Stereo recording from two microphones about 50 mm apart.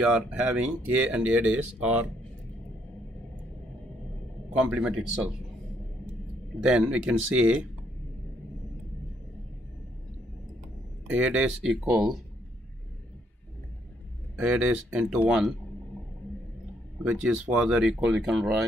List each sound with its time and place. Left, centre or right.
0.0 s speech: right
0.6 s speech: right
4.6 s speech: right
6.6 s speech: centre
11.1 s speech: right
11.9 s speech: centre
14.3 s speech: right
17.0 s speech: right